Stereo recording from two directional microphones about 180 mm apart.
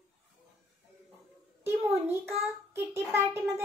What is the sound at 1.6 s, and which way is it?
A child's voice, 15° right (ahead or behind).